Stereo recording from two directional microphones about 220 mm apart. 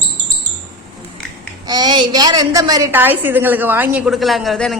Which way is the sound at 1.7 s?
20° right (ahead or behind).